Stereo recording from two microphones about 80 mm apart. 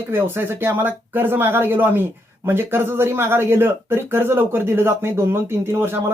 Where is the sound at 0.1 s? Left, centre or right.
Right.